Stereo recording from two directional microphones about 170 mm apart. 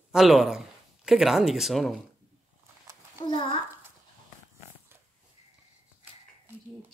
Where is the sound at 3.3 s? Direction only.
30° left (ahead or behind).